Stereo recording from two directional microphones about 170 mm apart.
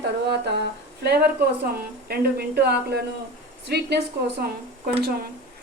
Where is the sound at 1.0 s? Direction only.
70° right (ahead or behind).